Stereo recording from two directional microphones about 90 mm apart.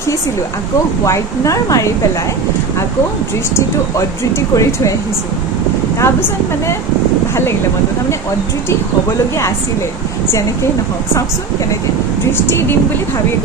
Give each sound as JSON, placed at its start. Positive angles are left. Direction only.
{"t": 1.0, "sound": "a woman's voice", "side_deg": 35}
{"t": 4.6, "sound": "a woman's voice", "side_deg": 35}
{"t": 5.9, "sound": "speech", "side_deg": 30}
{"t": 12.3, "sound": "speech", "side_deg": 25}